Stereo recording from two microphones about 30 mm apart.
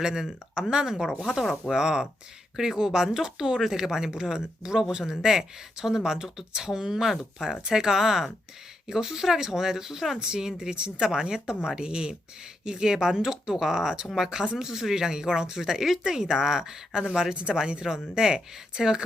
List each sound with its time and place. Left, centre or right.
0.0 s speech: right
0.9 s speech: centre
10.2 s speech: right
14.5 s speech: centre